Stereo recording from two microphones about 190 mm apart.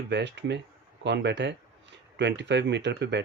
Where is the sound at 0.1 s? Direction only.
65° right (ahead or behind).